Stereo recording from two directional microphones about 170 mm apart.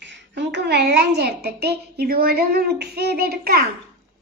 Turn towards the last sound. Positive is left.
turn(degrees=-65)  # may be behind; listen again after turning